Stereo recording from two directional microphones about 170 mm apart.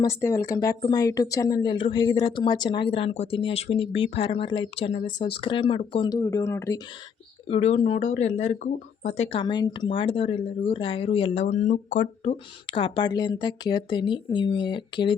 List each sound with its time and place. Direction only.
0.0 s speech: 15° left (ahead or behind)
6.1 s speech: 15° left (ahead or behind)
7.4 s speech: 35° left (ahead or behind)